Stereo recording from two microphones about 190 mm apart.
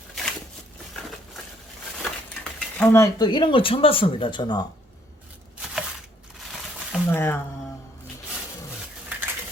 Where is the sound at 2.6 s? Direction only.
10° left (ahead or behind).